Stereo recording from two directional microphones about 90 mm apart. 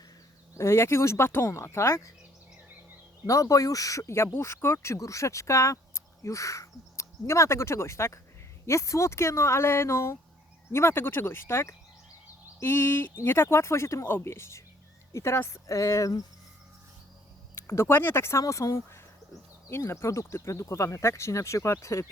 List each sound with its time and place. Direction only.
0.5 s speech: 30° left (ahead or behind)
3.2 s speech: 35° left (ahead or behind)
17.5 s speech: 30° left (ahead or behind)